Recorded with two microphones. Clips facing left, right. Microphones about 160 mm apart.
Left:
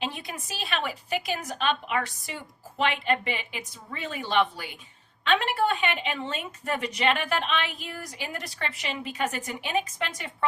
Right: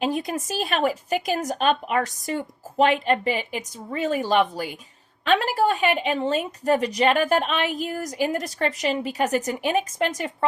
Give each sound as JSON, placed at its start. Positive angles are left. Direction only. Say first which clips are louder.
{"t": 0.0, "sound": "a woman's voice", "louder": "right 9 dB", "side_deg": -45}